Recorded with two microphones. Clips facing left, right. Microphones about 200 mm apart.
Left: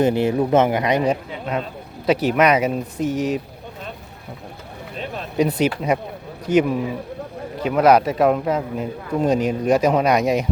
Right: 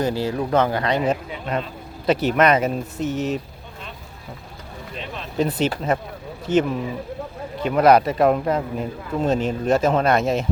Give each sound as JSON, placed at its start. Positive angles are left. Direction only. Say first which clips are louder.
{"t": 0.0, "sound": "speech", "louder": "left 5 dB", "side_deg": 20}
{"t": 1.1, "sound": "a man's voice", "louder": "left 1 dB", "side_deg": 5}
{"t": 5.4, "sound": "speech", "louder": "left 2 dB", "side_deg": 10}